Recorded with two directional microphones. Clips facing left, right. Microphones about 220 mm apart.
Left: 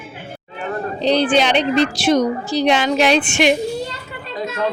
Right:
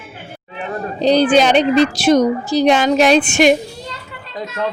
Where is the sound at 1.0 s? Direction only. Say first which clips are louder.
Right 4 dB; 45° right (ahead or behind).